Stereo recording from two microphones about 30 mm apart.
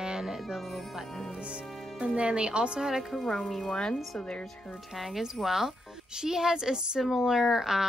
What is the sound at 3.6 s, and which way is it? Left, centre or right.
Speech, left.